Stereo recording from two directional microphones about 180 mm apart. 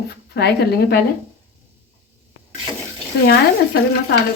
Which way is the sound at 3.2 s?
60° left (ahead or behind).